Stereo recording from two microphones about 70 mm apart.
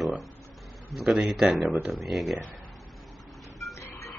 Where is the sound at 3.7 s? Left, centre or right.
Left.